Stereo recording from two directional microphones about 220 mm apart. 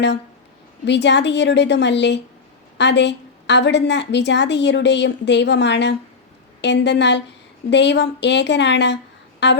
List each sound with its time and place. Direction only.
0.9 s a woman's voice: 50° left (ahead or behind)